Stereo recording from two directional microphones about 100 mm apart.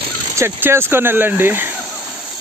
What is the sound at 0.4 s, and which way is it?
Speech, 25° right (ahead or behind).